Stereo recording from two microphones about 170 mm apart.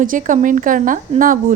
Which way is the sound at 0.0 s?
50° right (ahead or behind).